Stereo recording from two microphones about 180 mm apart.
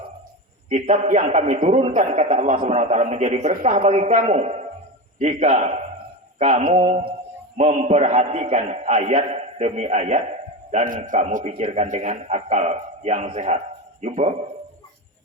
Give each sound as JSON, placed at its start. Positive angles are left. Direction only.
{"t": 0.7, "sound": "a man's voice", "side_deg": -40}